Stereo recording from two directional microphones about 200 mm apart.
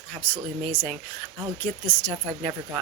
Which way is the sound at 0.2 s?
10° left (ahead or behind).